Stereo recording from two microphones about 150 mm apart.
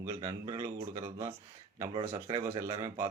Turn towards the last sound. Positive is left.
turn(degrees=-20)  # may be behind; listen again after turning